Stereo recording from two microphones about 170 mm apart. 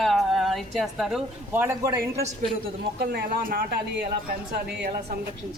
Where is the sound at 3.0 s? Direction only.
65° right (ahead or behind).